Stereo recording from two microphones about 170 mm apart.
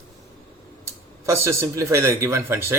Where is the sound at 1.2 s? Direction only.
15° right (ahead or behind).